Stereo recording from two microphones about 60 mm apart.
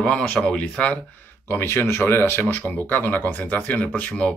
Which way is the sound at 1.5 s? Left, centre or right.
Left.